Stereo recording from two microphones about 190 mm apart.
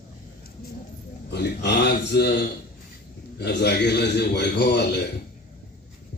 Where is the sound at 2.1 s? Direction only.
60° left (ahead or behind).